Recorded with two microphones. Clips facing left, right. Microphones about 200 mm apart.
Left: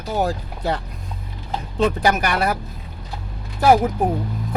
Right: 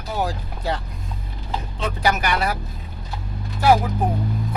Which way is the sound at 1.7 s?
50° left (ahead or behind).